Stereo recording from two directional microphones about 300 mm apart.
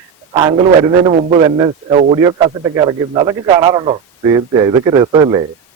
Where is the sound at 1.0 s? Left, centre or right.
Centre.